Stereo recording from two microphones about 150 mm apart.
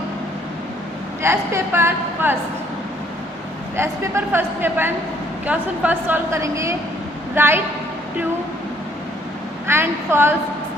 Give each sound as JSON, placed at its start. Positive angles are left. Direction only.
{"t": 1.2, "sound": "a woman's voice", "side_deg": -15}
{"t": 3.8, "sound": "a woman's voice", "side_deg": -15}
{"t": 9.6, "sound": "a woman's voice", "side_deg": -15}